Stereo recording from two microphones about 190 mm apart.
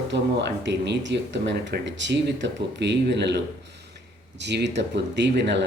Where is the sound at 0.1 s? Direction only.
65° right (ahead or behind).